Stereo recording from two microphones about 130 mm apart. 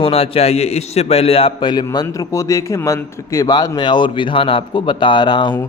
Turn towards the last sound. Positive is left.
turn(degrees=35)  # may be behind; listen again after turning